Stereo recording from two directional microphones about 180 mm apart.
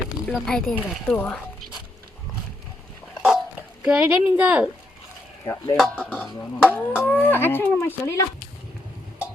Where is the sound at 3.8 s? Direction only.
5° right (ahead or behind).